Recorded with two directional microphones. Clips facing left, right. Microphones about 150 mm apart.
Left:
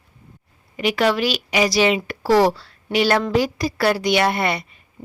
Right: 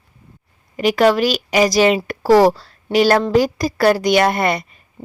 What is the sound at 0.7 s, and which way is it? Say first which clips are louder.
A woman's voice: right 5 dB; 40° right (ahead or behind).